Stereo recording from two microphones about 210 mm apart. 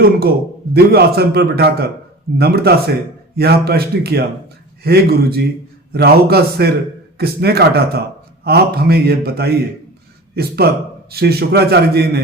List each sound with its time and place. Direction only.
0.7 s a man's voice: 50° right (ahead or behind)